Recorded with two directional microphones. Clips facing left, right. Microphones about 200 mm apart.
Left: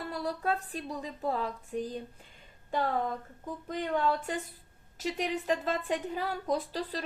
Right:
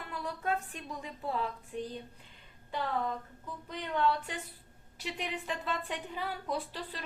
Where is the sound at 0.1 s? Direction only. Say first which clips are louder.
Left 2 dB; 35° left (ahead or behind).